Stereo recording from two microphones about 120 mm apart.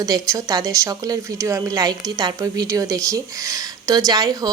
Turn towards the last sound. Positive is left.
turn(degrees=-30)  # may be behind; listen again after turning